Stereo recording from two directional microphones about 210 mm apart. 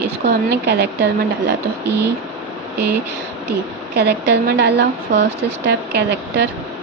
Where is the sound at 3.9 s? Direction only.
50° right (ahead or behind).